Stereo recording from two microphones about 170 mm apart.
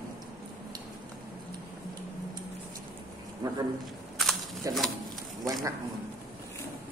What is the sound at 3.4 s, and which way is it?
Speech, 20° right (ahead or behind).